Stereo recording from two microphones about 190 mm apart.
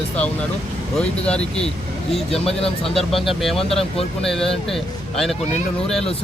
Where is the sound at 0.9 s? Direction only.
5° left (ahead or behind).